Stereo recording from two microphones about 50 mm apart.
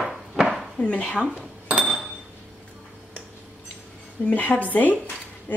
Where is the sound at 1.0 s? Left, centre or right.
Centre.